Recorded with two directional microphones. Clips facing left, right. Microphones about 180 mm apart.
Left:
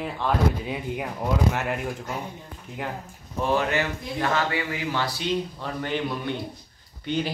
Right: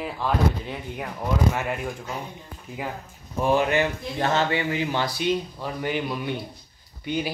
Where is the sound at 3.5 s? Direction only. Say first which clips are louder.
Right 3 dB; 20° right (ahead or behind).